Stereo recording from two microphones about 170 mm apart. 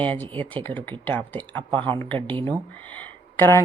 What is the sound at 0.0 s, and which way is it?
Speech, 10° left (ahead or behind).